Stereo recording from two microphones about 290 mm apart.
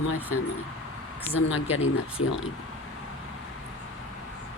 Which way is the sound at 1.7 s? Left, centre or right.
Left.